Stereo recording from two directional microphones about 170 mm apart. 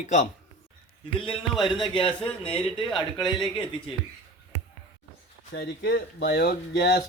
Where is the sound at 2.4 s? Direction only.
35° left (ahead or behind).